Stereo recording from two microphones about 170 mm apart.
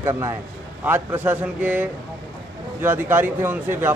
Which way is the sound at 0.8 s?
10° right (ahead or behind).